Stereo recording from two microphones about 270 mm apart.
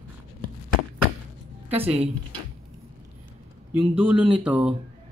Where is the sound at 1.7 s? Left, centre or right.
Right.